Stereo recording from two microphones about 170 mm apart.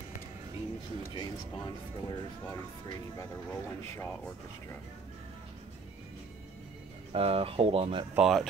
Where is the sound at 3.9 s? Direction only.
15° left (ahead or behind).